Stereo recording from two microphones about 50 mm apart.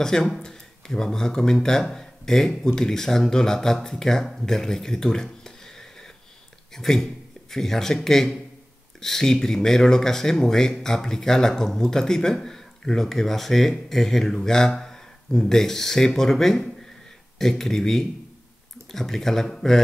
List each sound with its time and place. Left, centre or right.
0.0 s speech: centre